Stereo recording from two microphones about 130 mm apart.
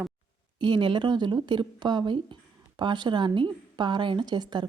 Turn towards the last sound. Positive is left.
turn(degrees=-35)  # may be behind; listen again after turning